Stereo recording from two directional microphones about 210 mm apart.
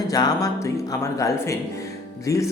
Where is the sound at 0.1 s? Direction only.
15° left (ahead or behind).